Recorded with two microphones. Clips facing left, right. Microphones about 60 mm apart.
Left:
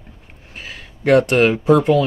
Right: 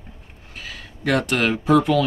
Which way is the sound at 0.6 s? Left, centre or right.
Left.